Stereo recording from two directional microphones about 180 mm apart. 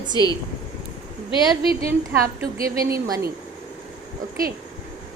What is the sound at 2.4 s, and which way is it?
Speech, 20° right (ahead or behind).